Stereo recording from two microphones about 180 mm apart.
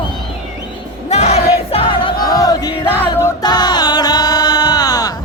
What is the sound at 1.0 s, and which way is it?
Music, 35° left (ahead or behind).